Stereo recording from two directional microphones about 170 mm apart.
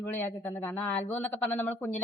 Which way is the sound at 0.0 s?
10° left (ahead or behind).